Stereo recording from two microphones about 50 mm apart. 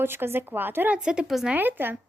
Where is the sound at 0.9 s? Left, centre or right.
Centre.